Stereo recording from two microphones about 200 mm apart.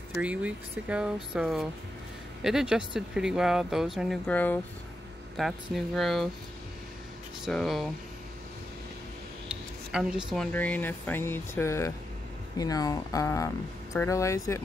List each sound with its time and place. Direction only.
0.2 s speech: 5° right (ahead or behind)
7.4 s speech: centre (ahead or behind)
9.9 s speech: 5° right (ahead or behind); by 14.6 s 15° left (ahead or behind)